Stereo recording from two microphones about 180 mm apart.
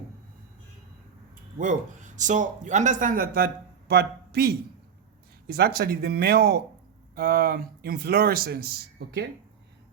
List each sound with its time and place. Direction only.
1.5 s speech: 45° right (ahead or behind); by 4.5 s 60° right (ahead or behind)
5.5 s speech: 60° right (ahead or behind)